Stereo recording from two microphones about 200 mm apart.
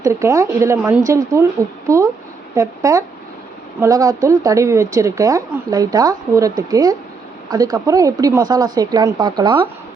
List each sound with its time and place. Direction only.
0.0 s a woman's voice: 15° right (ahead or behind)